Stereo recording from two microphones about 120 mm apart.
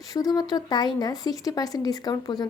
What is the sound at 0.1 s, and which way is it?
Speech, 30° left (ahead or behind).